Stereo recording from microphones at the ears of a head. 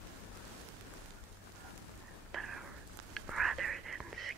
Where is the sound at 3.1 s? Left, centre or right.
Right.